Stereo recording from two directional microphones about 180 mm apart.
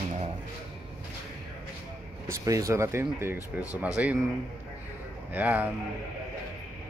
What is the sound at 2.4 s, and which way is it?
Speech, 20° right (ahead or behind).